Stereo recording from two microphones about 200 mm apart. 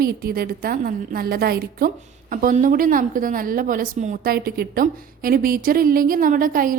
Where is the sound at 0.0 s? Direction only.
50° right (ahead or behind).